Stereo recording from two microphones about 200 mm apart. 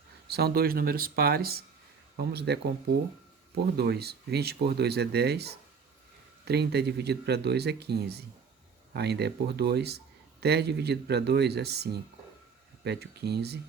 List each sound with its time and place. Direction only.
0.3 s speech: 50° right (ahead or behind)